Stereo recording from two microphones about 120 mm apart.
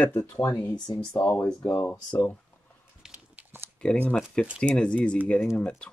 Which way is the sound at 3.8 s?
10° left (ahead or behind).